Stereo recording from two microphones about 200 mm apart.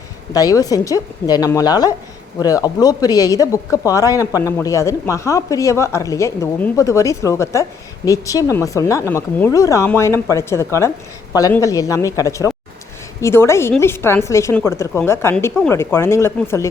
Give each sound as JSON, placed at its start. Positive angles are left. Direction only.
{"t": 0.3, "sound": "speech", "side_deg": 20}